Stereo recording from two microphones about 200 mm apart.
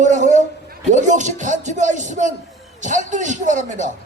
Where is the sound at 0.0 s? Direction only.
40° right (ahead or behind).